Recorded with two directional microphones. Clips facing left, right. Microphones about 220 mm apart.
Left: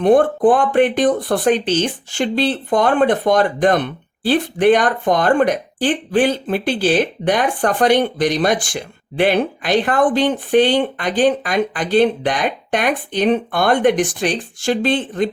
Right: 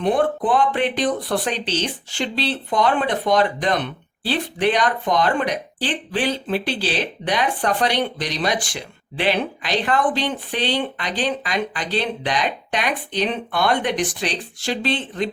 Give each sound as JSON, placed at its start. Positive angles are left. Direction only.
{"t": 0.0, "sound": "speech", "side_deg": 45}